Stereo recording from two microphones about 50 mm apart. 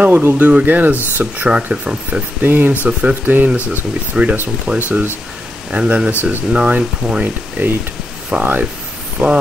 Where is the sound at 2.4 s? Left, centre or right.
Right.